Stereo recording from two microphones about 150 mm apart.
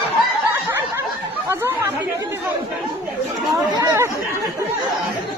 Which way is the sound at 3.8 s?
20° right (ahead or behind).